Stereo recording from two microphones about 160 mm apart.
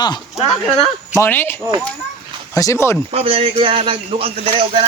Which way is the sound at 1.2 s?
15° left (ahead or behind).